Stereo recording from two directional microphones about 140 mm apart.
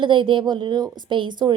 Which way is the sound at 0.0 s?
35° right (ahead or behind).